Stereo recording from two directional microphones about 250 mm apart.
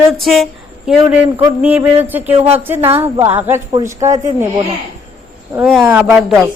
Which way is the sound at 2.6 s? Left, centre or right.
Centre.